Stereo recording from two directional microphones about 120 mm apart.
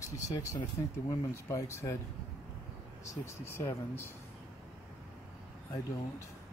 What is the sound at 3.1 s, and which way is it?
Speech, 25° left (ahead or behind).